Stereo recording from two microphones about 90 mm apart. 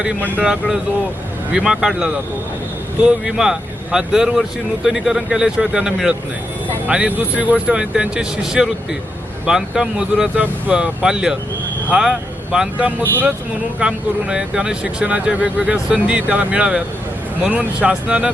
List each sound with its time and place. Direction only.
0.2 s speech: 20° right (ahead or behind)
0.4 s speech: 10° right (ahead or behind)
3.2 s speech: 5° right (ahead or behind)